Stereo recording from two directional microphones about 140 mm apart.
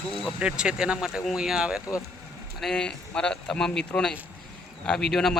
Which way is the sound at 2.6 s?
5° left (ahead or behind).